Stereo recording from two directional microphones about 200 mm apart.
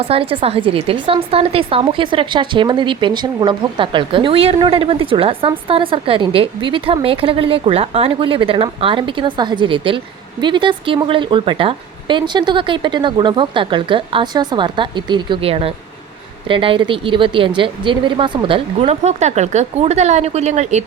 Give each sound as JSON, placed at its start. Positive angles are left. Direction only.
{"t": 0.0, "sound": "a woman's voice", "side_deg": -30}